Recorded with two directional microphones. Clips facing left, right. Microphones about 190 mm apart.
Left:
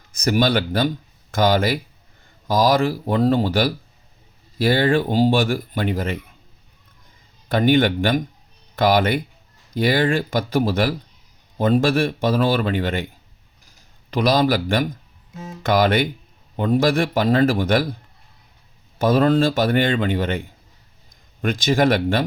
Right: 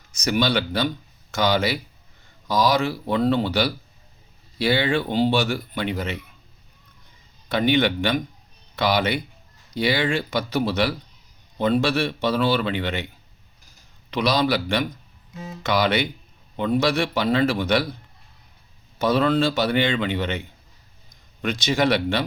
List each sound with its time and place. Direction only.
0.2 s speech: 50° left (ahead or behind)
7.4 s speech: 50° left (ahead or behind)
14.1 s speech: 50° left (ahead or behind)
18.9 s speech: 45° left (ahead or behind)